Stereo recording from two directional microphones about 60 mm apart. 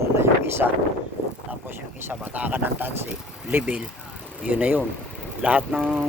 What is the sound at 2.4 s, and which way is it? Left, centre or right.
Speech, right.